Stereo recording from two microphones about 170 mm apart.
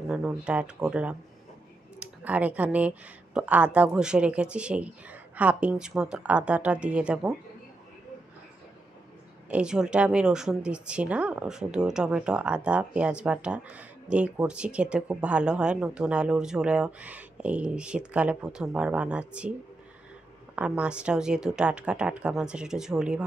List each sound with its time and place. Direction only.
0.1 s a woman's voice: 5° right (ahead or behind)
9.5 s a woman's voice: 5° right (ahead or behind)
20.5 s a woman's voice: 5° right (ahead or behind)